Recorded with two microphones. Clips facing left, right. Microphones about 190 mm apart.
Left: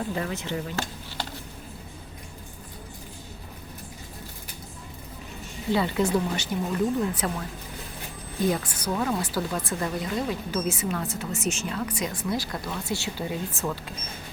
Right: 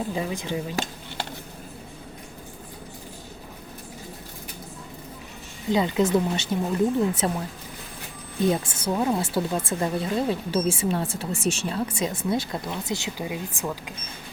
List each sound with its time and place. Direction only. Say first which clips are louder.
0.1 s speech: right 2 dB; 15° right (ahead or behind)
5.7 s speech: right 3 dB; 20° right (ahead or behind)
8.4 s speech: right 3 dB; 25° right (ahead or behind)